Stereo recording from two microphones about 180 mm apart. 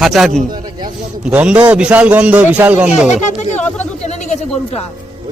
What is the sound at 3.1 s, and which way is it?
Speech, 40° left (ahead or behind).